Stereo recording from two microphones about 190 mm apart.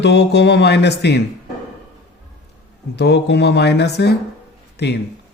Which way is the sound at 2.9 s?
60° left (ahead or behind).